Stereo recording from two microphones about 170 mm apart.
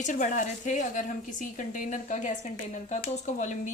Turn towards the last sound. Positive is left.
turn(degrees=45)  # may be behind; listen again after turning